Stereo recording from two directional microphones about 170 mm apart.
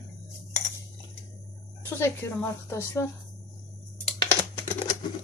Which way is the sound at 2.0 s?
15° left (ahead or behind).